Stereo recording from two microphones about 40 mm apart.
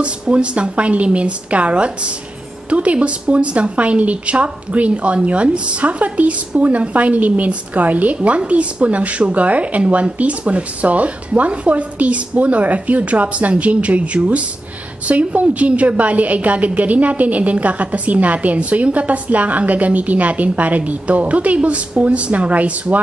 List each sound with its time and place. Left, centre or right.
0.0 s a woman's voice: right